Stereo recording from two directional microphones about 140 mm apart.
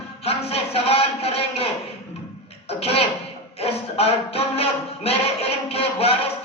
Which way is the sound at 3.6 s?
45° left (ahead or behind).